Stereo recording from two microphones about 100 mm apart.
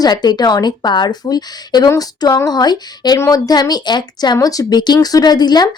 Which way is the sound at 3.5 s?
40° left (ahead or behind).